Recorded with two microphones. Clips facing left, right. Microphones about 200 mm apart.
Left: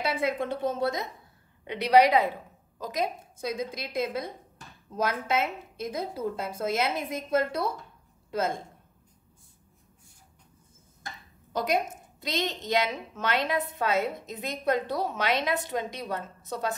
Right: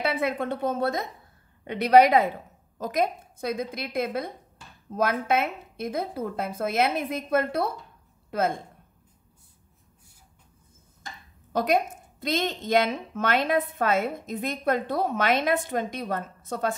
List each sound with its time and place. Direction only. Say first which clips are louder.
0.0 s a woman's voice: right 2 dB; 55° right (ahead or behind)
11.5 s a woman's voice: right 4 dB; 55° right (ahead or behind)